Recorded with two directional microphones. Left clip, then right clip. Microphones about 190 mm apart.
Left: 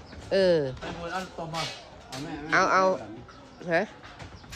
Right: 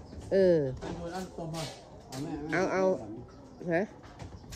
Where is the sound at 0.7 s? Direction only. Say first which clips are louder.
Left 3 dB; 45° right (ahead or behind).